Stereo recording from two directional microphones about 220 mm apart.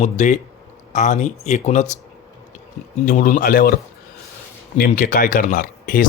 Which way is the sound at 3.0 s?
40° left (ahead or behind).